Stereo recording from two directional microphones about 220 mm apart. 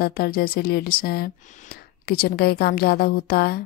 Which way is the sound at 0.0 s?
45° left (ahead or behind).